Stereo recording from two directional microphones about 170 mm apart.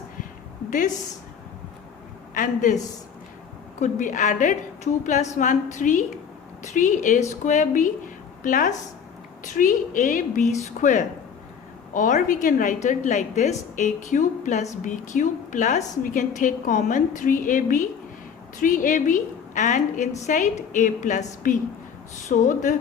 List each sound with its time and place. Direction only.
2.3 s a woman's voice: 50° left (ahead or behind)
3.8 s a woman's voice: 45° left (ahead or behind)